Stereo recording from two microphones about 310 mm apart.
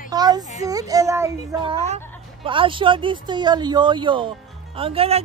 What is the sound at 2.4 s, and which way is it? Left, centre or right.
Speech, centre.